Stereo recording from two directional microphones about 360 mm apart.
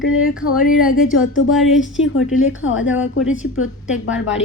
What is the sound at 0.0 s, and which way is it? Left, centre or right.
A woman's voice, left.